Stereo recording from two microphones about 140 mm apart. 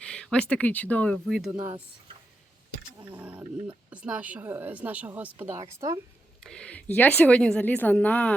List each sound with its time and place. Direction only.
0.0 s speech: 5° left (ahead or behind)
3.0 s speech: 10° right (ahead or behind)
6.4 s speech: 5° left (ahead or behind)